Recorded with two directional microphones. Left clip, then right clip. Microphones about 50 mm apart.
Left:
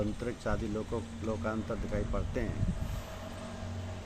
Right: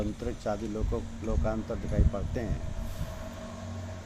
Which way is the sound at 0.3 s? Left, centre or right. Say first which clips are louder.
Right 3 dB; left.